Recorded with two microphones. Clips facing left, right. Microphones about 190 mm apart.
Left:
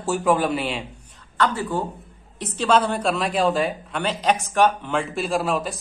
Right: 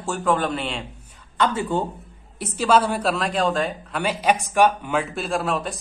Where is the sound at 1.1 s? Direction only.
10° right (ahead or behind).